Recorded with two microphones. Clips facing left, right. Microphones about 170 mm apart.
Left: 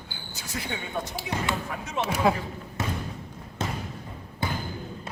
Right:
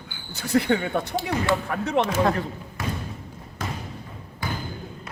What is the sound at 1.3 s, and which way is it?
Speech, 20° left (ahead or behind).